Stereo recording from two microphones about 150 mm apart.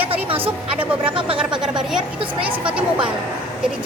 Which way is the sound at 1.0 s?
35° right (ahead or behind).